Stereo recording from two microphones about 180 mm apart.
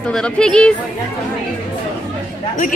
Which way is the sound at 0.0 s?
5° left (ahead or behind).